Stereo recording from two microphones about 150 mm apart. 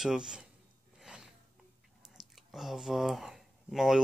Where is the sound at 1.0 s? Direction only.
5° right (ahead or behind).